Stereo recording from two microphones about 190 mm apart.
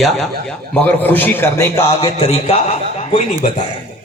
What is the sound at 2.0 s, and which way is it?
A man's voice, 30° left (ahead or behind).